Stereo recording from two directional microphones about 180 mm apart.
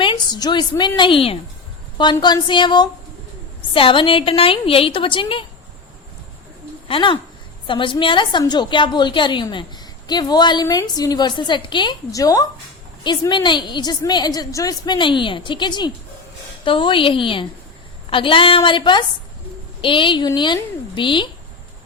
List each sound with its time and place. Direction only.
0.0 s a woman's voice: 25° left (ahead or behind)
6.8 s a woman's voice: 30° left (ahead or behind)